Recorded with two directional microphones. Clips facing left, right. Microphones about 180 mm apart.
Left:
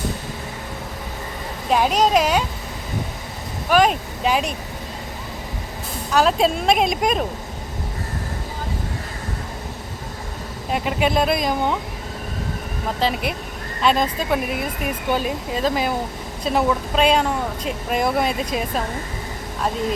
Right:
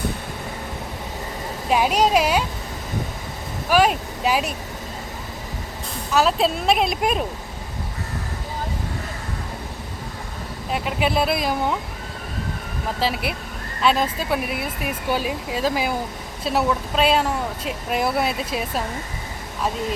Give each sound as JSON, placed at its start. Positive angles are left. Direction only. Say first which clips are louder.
{"t": 1.7, "sound": "a woman's voice", "louder": "left 1 dB", "side_deg": -5}
{"t": 3.7, "sound": "speech", "louder": "left 1 dB", "side_deg": -5}
{"t": 6.1, "sound": "speech", "louder": "left 2 dB", "side_deg": -5}
{"t": 10.7, "sound": "speech", "louder": "left 2 dB", "side_deg": 0}
{"t": 13.0, "sound": "speech", "louder": "left 2 dB", "side_deg": -5}